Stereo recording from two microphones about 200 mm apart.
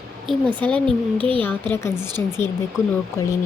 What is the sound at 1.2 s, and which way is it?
Speech, 25° right (ahead or behind).